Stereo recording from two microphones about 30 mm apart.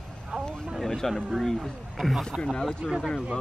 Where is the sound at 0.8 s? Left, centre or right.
Centre.